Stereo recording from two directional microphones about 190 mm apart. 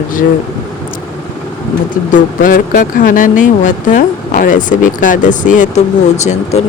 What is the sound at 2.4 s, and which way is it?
Speech, 45° left (ahead or behind).